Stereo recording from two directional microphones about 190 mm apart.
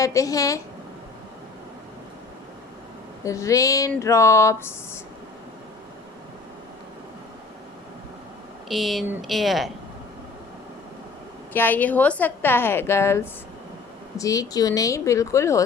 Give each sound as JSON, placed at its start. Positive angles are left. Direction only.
{"t": 0.0, "sound": "a woman's voice", "side_deg": 15}
{"t": 3.2, "sound": "a woman's voice", "side_deg": 15}
{"t": 8.7, "sound": "a woman's voice", "side_deg": 0}
{"t": 11.5, "sound": "a woman's voice", "side_deg": 10}